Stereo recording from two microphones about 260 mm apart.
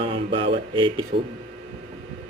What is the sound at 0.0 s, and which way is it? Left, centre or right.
Speech, right.